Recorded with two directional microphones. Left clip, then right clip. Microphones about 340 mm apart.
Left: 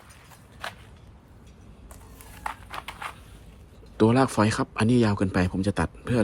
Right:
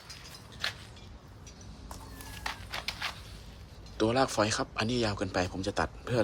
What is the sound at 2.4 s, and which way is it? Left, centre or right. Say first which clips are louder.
Walk: left 2 dB; centre.